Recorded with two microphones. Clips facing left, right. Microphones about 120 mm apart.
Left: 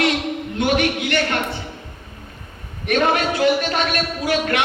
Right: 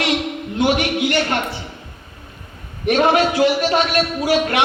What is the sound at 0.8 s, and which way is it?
Speech, 25° right (ahead or behind).